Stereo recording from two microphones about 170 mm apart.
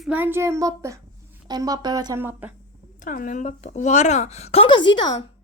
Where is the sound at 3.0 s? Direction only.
50° left (ahead or behind); by 5.1 s 25° left (ahead or behind).